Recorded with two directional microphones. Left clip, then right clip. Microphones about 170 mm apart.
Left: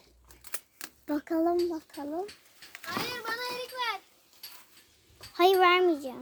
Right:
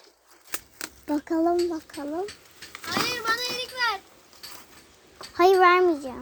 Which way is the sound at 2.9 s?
40° right (ahead or behind).